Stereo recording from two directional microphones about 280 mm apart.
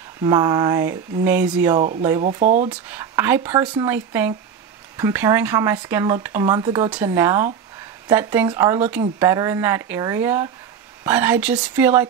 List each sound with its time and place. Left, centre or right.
0.2 s speech: centre
1.8 s speech: right
2.7 s speech: centre